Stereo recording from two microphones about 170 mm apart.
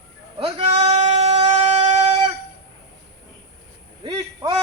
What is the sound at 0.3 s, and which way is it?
Bleat, 30° right (ahead or behind).